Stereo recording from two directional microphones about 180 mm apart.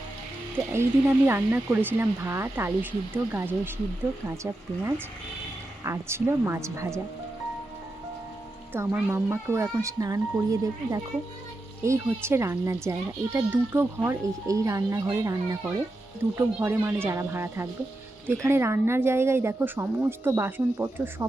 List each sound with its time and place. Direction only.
0.5 s a child's voice: 15° right (ahead or behind)
8.7 s a child's voice: 10° right (ahead or behind)